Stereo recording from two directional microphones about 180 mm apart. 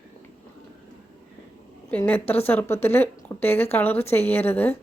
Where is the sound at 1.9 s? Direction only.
10° left (ahead or behind).